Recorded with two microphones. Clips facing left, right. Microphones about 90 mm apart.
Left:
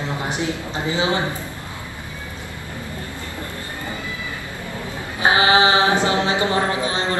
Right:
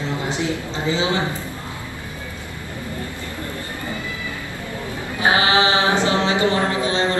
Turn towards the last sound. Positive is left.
turn(degrees=20)  # may be behind; listen again after turning